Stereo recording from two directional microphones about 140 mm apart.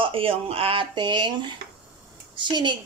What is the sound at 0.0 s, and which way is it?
Speech, 40° right (ahead or behind).